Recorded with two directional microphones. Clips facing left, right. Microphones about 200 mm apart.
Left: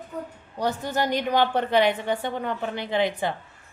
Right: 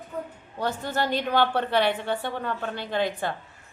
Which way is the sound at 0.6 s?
15° left (ahead or behind).